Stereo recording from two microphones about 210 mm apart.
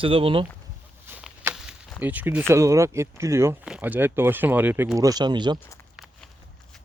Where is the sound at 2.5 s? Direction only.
15° right (ahead or behind).